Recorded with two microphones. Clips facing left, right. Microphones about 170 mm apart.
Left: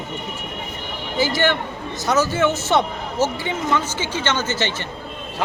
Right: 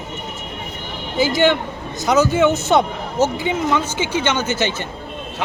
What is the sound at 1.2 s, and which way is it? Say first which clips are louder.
A man's voice: right 4 dB; 15° right (ahead or behind).